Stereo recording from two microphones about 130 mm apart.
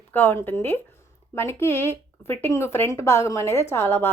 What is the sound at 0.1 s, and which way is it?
Speech, 15° left (ahead or behind).